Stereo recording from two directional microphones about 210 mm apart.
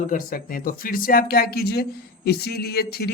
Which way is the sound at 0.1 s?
40° left (ahead or behind).